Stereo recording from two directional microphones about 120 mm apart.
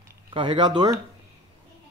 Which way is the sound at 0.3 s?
40° right (ahead or behind).